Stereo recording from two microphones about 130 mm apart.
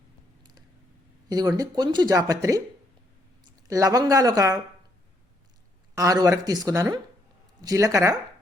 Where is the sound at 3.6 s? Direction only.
25° right (ahead or behind).